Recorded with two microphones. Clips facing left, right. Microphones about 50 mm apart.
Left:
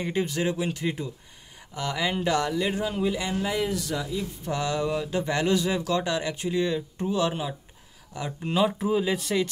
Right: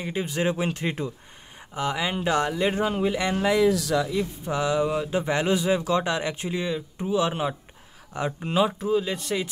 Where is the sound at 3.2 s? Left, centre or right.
Right.